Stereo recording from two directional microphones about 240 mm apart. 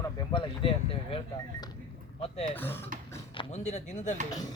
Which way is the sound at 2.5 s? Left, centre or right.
Centre.